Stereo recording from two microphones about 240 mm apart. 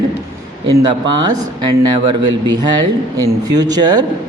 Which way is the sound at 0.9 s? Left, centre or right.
Centre.